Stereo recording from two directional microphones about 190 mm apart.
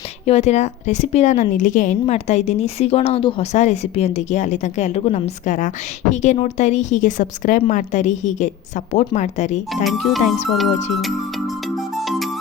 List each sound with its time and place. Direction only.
0.3 s a woman's voice: 35° left (ahead or behind)
9.8 s speech: centre (ahead or behind)
11.9 s music: centre (ahead or behind)